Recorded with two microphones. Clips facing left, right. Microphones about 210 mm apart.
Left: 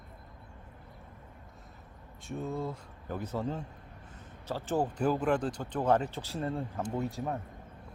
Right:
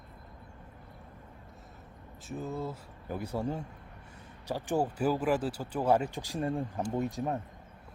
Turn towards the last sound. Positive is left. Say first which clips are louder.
# right 2 dB
turn(degrees=-20)  # may be behind; listen again after turning